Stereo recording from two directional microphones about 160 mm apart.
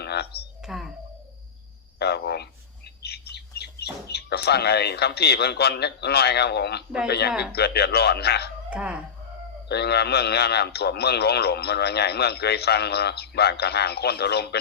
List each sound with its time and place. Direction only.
0.0 s a sound: 90° left
0.6 s speech: centre (ahead or behind)
2.0 s bird: 90° left
4.1 s a man's voice: 90° left
8.7 s speech: 5° right (ahead or behind)
9.6 s a man's voice: 90° left